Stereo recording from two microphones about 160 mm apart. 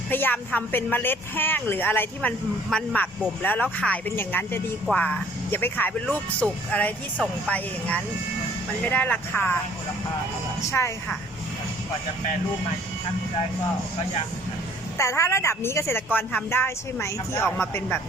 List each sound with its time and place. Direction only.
0.1 s speech: 10° left (ahead or behind)
10.6 s speech: 20° left (ahead or behind)
14.9 s speech: 20° left (ahead or behind)